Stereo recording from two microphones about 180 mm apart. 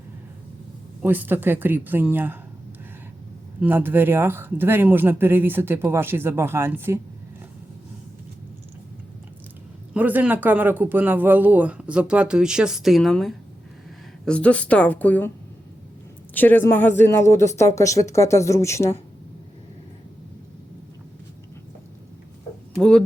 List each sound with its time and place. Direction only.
1.0 s speech: 10° right (ahead or behind)
3.6 s speech: 10° right (ahead or behind)
9.9 s speech: 10° right (ahead or behind); by 15.3 s 10° left (ahead or behind)
16.3 s speech: 10° left (ahead or behind)
22.7 s speech: centre (ahead or behind)